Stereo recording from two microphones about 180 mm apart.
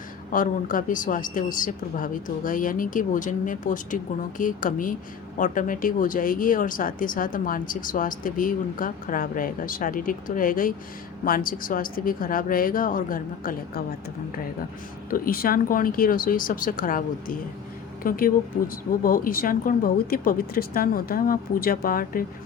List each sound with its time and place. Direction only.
0.3 s speech: 50° left (ahead or behind)
15.1 s speech: 55° left (ahead or behind)